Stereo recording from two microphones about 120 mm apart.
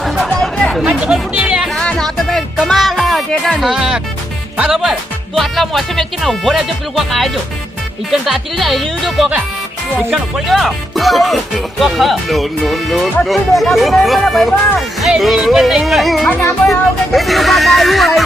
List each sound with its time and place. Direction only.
0.0 s music: centre (ahead or behind)
0.9 s music: 10° right (ahead or behind)
1.7 s music: 5° left (ahead or behind)
4.5 s speech: 10° right (ahead or behind)